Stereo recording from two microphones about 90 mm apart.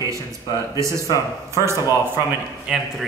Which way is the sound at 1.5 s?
30° right (ahead or behind).